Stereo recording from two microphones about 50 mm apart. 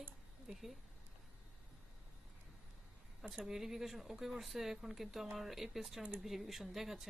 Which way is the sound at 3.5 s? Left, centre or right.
Centre.